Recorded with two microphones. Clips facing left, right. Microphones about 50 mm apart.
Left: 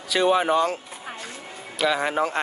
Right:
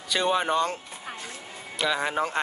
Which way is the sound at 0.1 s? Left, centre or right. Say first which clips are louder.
Left 4 dB; centre.